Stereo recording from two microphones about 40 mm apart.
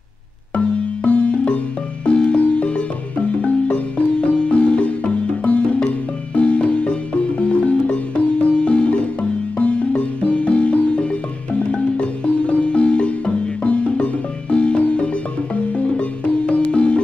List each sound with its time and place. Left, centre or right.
1.0 s music: left